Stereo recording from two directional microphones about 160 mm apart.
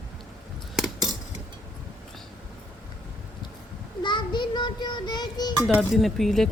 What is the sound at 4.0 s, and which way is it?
Child singing, 30° left (ahead or behind).